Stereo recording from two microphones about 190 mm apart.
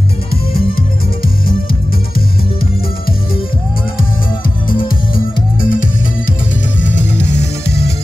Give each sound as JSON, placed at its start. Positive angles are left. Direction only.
{"t": 4.6, "sound": "music", "side_deg": 50}
{"t": 6.9, "sound": "music", "side_deg": 60}